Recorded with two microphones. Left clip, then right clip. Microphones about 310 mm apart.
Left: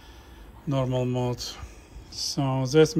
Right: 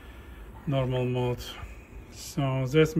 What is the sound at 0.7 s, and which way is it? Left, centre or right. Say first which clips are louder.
Speech: left 2 dB; left.